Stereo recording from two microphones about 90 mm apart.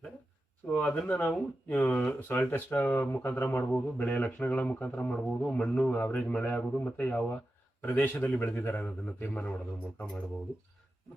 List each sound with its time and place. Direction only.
0.7 s a man's voice: 15° left (ahead or behind)
3.7 s a man's voice: 15° left (ahead or behind)